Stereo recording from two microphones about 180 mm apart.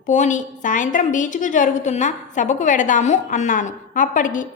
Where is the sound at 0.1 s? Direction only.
40° left (ahead or behind).